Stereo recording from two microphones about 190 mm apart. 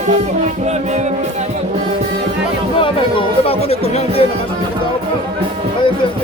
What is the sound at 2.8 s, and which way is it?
Speech, 30° left (ahead or behind).